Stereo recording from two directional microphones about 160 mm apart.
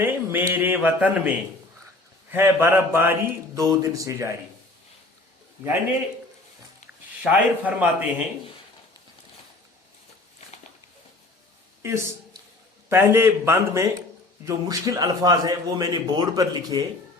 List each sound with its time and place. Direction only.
0.0 s speech: 15° right (ahead or behind)
2.3 s speech: 15° right (ahead or behind)
7.2 s speech: 10° right (ahead or behind)
11.8 s a man's voice: 20° right (ahead or behind)